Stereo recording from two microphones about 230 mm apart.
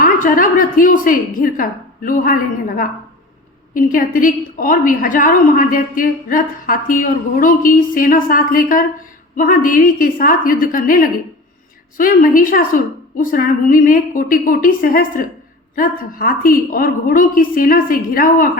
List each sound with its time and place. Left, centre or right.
0.0 s a woman's voice: left